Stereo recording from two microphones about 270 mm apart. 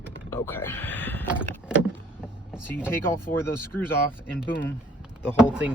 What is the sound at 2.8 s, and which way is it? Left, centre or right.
Speech, centre.